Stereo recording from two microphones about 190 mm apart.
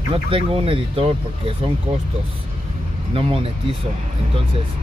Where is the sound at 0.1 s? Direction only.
30° right (ahead or behind).